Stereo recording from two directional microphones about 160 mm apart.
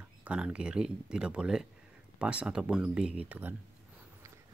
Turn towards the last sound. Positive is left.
turn(degrees=-10)  # may be behind; listen again after turning